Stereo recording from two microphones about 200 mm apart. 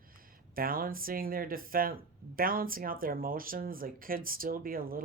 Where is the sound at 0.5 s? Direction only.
45° right (ahead or behind).